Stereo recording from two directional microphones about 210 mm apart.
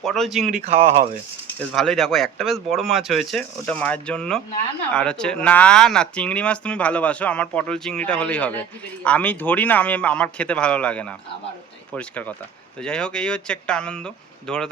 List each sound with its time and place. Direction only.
0.0 s speech: centre (ahead or behind)
0.6 s speech: 30° right (ahead or behind)
1.5 s speech: centre (ahead or behind)